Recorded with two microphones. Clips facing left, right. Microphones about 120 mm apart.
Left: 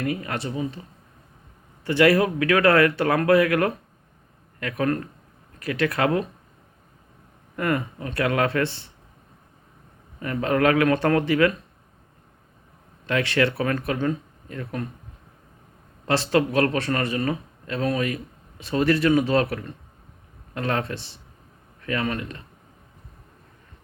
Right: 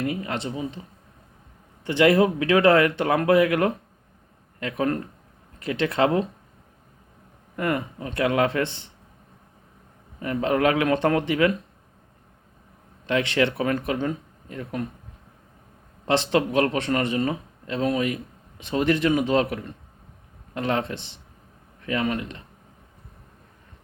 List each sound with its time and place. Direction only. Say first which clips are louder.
0.0 s speech: even; 20° right (ahead or behind)
7.5 s speech: left 1 dB; 20° right (ahead or behind)
10.4 s speech: left 2 dB; 20° right (ahead or behind)
13.1 s speech: even; 20° right (ahead or behind)
16.0 s speech: even; 20° right (ahead or behind)